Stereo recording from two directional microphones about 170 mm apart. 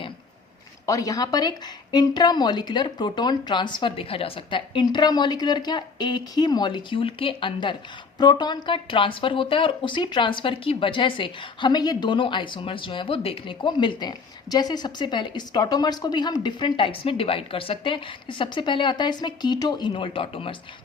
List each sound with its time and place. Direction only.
0.9 s speech: 20° left (ahead or behind)